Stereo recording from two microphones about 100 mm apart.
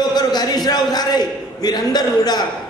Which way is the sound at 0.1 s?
45° left (ahead or behind).